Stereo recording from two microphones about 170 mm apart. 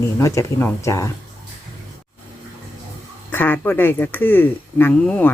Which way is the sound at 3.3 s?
10° left (ahead or behind).